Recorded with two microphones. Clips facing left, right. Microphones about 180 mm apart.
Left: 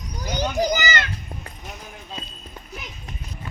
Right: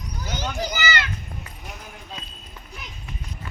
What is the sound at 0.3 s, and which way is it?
Children playing, 15° left (ahead or behind).